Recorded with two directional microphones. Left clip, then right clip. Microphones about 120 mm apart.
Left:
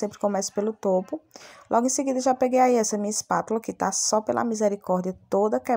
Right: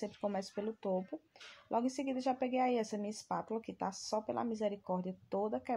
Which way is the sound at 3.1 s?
50° left (ahead or behind).